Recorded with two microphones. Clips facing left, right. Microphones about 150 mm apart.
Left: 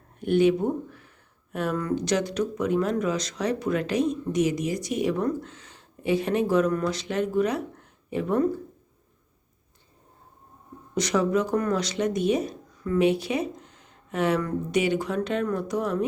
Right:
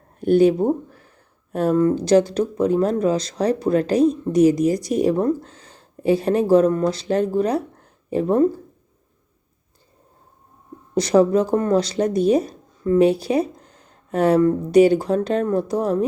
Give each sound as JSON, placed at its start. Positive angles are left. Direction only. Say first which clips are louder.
{"t": 0.2, "sound": "speech", "louder": "right 6 dB", "side_deg": -35}
{"t": 10.9, "sound": "speech", "louder": "right 8 dB", "side_deg": -35}